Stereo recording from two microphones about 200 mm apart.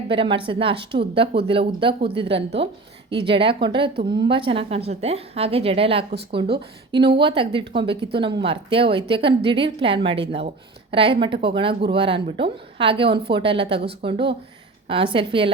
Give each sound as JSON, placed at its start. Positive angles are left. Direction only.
{"t": 0.1, "sound": "a woman's voice", "side_deg": -25}